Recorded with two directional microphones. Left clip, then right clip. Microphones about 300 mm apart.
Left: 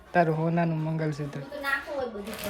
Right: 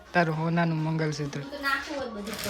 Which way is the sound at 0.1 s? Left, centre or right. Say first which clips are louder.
Left 2 dB; centre.